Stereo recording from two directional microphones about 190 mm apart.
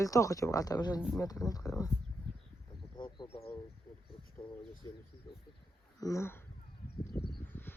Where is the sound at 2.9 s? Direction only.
25° left (ahead or behind).